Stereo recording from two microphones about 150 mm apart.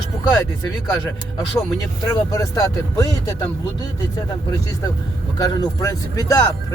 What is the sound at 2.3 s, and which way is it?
Speech, 25° left (ahead or behind).